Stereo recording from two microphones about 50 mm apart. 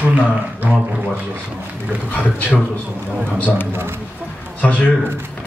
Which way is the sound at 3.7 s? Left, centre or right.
Right.